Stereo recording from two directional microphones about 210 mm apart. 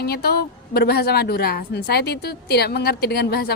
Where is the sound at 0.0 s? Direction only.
50° left (ahead or behind).